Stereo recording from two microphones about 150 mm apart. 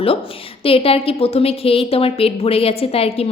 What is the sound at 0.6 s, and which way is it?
A woman's voice, 40° left (ahead or behind).